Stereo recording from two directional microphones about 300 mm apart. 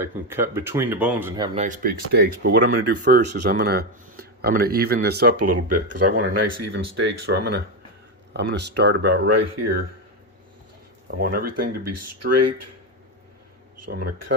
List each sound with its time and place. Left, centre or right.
0.0 s speech: centre
1.5 s speech: right
5.7 s speech: right
7.0 s speech: right
9.3 s speech: right
11.2 s speech: right
11.9 s speech: right
14.0 s speech: right